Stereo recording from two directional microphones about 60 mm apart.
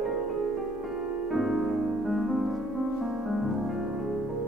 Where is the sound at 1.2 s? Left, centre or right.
Centre.